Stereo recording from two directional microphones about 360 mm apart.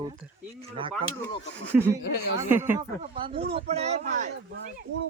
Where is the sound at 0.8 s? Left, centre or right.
Centre.